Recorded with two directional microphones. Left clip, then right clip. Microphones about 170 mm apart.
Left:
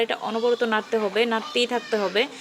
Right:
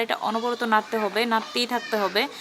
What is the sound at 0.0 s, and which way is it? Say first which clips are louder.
Speech: left 1 dB; 10° left (ahead or behind).